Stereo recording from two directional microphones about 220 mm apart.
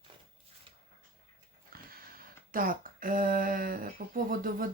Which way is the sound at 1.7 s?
40° right (ahead or behind).